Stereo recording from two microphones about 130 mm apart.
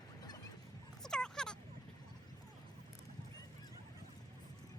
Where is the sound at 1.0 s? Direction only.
5° left (ahead or behind).